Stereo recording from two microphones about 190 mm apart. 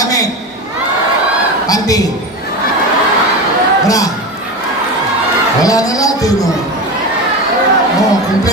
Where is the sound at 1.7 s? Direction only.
20° left (ahead or behind).